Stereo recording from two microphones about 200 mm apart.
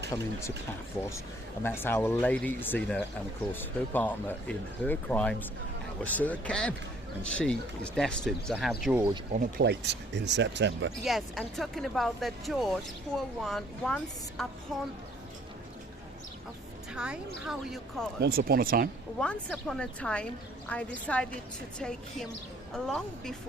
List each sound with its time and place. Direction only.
0.1 s speech: 15° left (ahead or behind)
1.6 s speech: 10° left (ahead or behind)
7.9 s speech: centre (ahead or behind)
9.3 s speech: 45° right (ahead or behind)
11.0 s speech: centre (ahead or behind)
16.9 s speech: 5° right (ahead or behind)
18.2 s speech: 50° right (ahead or behind)
19.2 s speech: 5° left (ahead or behind)